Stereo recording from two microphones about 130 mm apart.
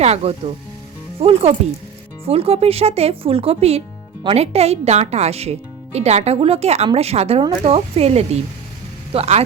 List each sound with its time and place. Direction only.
0.0 s speech: 55° right (ahead or behind)